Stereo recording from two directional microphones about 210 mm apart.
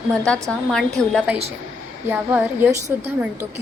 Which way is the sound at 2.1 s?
10° right (ahead or behind).